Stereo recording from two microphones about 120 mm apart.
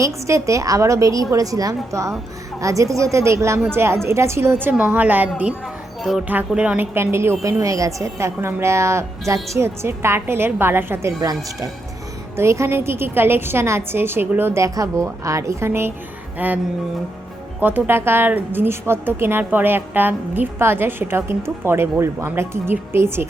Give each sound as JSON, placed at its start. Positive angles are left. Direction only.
{"t": 0.0, "sound": "a woman's voice", "side_deg": -25}
{"t": 5.6, "sound": "music", "side_deg": 0}
{"t": 6.2, "sound": "speech", "side_deg": -10}
{"t": 6.9, "sound": "a woman's voice", "side_deg": -20}
{"t": 12.4, "sound": "a woman's voice", "side_deg": -25}
{"t": 17.6, "sound": "a woman's voice", "side_deg": -15}